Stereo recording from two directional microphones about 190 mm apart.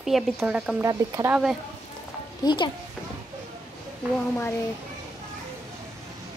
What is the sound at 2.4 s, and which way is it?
Speech, 25° left (ahead or behind).